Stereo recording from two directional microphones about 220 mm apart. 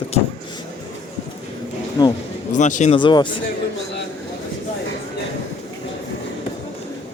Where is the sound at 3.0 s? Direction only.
20° left (ahead or behind).